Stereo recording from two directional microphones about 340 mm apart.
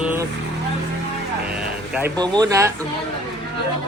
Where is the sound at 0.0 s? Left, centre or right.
Centre.